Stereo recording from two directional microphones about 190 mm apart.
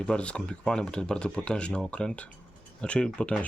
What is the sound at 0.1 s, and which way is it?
Speech, 5° left (ahead or behind).